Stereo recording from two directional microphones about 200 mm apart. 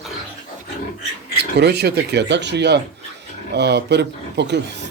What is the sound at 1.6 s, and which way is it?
Speech, 55° right (ahead or behind).